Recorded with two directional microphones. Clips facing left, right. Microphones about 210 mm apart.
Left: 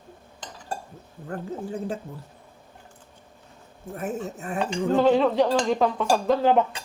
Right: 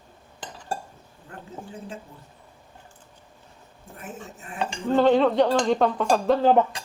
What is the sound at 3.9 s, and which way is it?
Speech, 40° left (ahead or behind).